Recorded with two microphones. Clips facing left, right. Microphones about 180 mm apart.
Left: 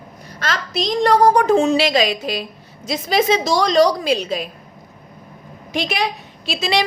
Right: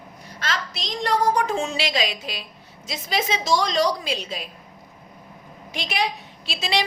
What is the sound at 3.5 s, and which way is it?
Speech, 75° left (ahead or behind).